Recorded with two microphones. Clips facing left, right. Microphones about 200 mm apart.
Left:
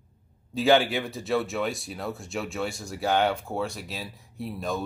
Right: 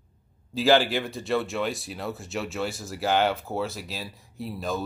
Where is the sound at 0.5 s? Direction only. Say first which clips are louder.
Even; centre (ahead or behind).